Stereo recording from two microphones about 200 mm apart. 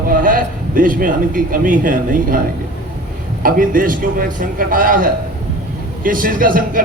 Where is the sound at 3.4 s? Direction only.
45° right (ahead or behind).